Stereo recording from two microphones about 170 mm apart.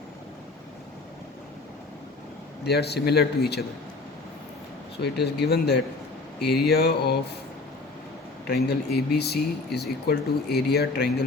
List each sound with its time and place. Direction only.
2.6 s speech: 75° left (ahead or behind)
5.1 s speech: 75° left (ahead or behind)
8.4 s speech: 70° left (ahead or behind)